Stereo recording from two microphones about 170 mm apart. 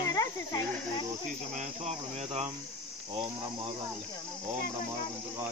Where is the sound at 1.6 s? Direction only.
40° right (ahead or behind).